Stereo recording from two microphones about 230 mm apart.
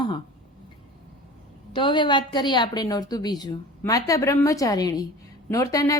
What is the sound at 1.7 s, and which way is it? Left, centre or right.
A woman's voice, left.